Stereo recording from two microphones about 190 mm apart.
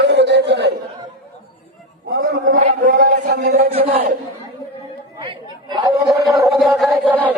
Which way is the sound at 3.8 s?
50° right (ahead or behind).